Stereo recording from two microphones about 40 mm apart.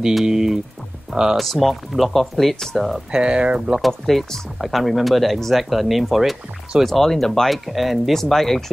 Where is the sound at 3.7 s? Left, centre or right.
Centre.